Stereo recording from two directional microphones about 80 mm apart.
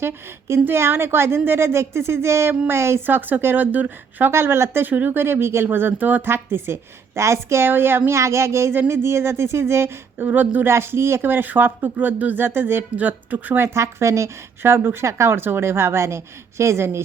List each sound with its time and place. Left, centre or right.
0.0 s a woman's voice: right
4.3 s a woman's voice: right
10.2 s speech: right
10.7 s speech: right
13.7 s a woman's voice: right